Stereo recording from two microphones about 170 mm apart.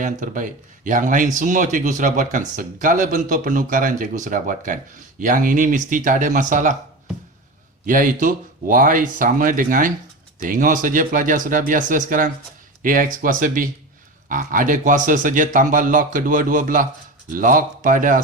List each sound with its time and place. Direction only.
0.0 s speech: 50° right (ahead or behind)
7.9 s speech: 50° right (ahead or behind)